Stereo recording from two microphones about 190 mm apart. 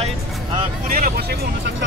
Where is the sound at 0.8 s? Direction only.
50° right (ahead or behind).